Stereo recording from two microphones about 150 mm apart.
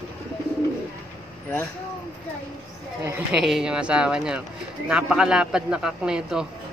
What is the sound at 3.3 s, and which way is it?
A man's voice, centre (ahead or behind).